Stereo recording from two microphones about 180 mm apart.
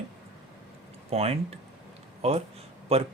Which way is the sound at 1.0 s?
35° right (ahead or behind).